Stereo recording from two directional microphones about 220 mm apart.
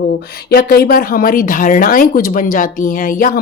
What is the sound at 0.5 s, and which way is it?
Speech, 45° left (ahead or behind).